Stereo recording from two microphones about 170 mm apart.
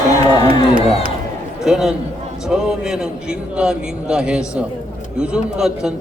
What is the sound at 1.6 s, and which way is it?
A man's voice, centre (ahead or behind).